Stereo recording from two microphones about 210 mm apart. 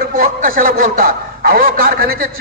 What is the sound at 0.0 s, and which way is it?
A man's voice, 40° right (ahead or behind).